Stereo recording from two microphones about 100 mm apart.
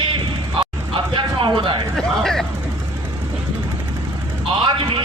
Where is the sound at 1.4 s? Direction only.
60° right (ahead or behind).